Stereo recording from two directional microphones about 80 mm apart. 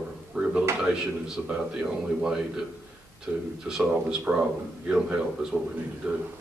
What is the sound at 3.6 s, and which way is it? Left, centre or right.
A man's voice, centre.